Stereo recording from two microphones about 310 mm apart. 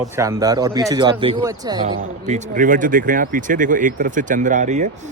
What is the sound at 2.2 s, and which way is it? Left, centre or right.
Speech, right.